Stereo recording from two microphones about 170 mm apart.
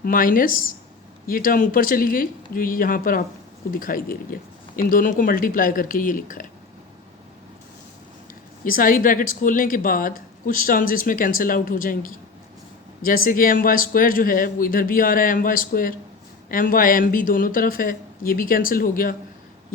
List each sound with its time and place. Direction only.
0.0 s a woman's voice: 55° left (ahead or behind)
8.6 s a woman's voice: 55° left (ahead or behind)